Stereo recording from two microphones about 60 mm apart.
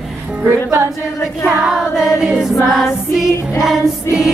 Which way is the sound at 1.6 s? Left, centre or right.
Centre.